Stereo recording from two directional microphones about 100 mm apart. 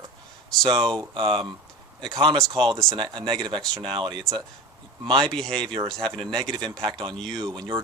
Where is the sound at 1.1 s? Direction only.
55° right (ahead or behind).